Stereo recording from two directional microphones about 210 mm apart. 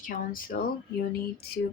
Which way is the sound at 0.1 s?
40° left (ahead or behind).